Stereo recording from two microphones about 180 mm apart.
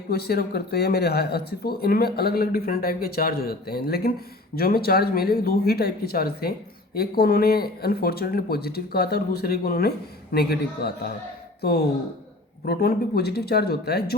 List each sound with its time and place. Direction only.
0.1 s speech: 60° left (ahead or behind)
12.6 s speech: 65° left (ahead or behind)